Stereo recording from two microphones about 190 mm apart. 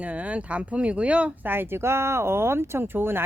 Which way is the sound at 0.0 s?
5° right (ahead or behind).